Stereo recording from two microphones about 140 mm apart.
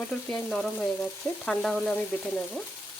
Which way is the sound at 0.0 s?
10° left (ahead or behind).